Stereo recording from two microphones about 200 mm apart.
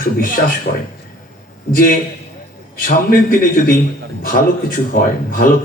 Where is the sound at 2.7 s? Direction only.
45° left (ahead or behind).